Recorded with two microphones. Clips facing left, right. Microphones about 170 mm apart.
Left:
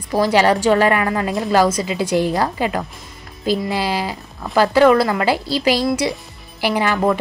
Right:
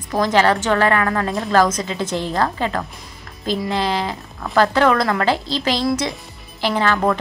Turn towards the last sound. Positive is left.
turn(degrees=10)  # may be behind; listen again after turning